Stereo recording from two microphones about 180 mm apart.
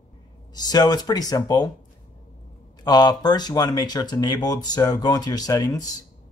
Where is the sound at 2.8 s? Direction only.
20° left (ahead or behind).